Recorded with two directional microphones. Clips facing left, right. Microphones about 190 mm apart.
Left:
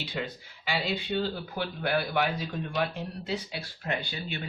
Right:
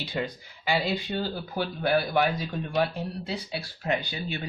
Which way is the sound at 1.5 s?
40° right (ahead or behind).